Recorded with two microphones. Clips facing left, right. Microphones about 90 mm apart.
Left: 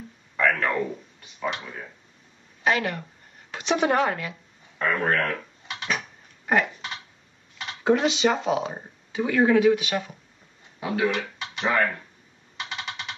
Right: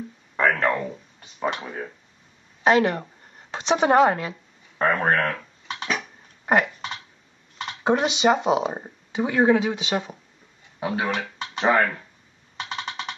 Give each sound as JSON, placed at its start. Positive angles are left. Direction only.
{"t": 0.4, "sound": "speech", "side_deg": -35}
{"t": 7.8, "sound": "speech", "side_deg": -20}
{"t": 10.8, "sound": "speech", "side_deg": -35}